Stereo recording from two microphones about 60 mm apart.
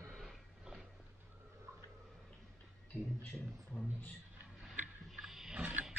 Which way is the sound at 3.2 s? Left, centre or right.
Centre.